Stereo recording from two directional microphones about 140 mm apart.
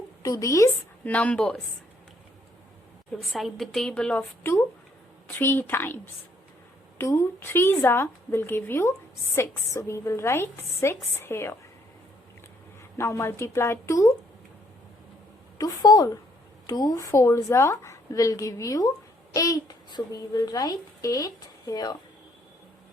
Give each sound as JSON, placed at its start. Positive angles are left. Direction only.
{"t": 0.2, "sound": "a woman's voice", "side_deg": 25}
{"t": 1.0, "sound": "a woman's voice", "side_deg": 10}
{"t": 3.2, "sound": "a woman's voice", "side_deg": 0}
{"t": 7.0, "sound": "a woman's voice", "side_deg": 20}
{"t": 13.0, "sound": "a woman's voice", "side_deg": 20}
{"t": 15.5, "sound": "a woman's voice", "side_deg": 25}